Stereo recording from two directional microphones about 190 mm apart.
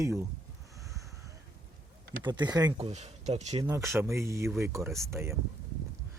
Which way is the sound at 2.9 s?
35° right (ahead or behind).